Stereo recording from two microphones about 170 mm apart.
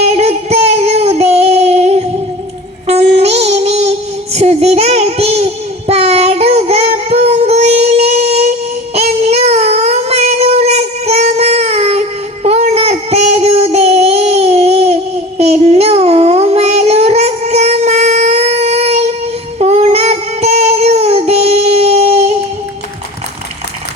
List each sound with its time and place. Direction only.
0.1 s child singing: 35° right (ahead or behind)